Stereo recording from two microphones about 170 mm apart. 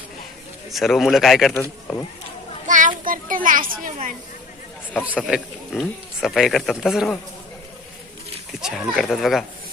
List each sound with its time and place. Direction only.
0.7 s speech: centre (ahead or behind)
2.6 s children playing: 50° right (ahead or behind)
5.0 s speech: 5° right (ahead or behind)
8.6 s speech: 5° right (ahead or behind)